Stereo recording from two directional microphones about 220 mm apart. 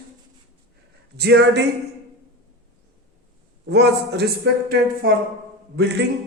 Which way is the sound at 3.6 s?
50° right (ahead or behind).